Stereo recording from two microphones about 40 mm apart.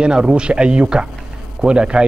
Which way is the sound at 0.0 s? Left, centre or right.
Right.